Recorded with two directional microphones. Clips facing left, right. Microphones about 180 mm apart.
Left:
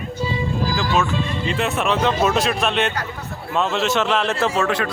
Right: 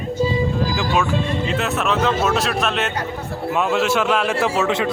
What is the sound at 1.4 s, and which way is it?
Speech, centre (ahead or behind).